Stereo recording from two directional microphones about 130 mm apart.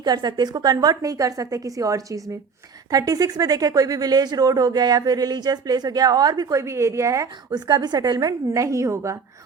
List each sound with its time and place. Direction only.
0.0 s speech: 35° right (ahead or behind)